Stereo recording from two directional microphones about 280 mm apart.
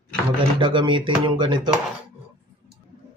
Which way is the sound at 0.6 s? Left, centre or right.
Centre.